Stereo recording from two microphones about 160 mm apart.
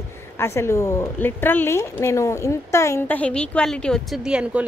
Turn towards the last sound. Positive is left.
turn(degrees=-5)  # may be behind; listen again after turning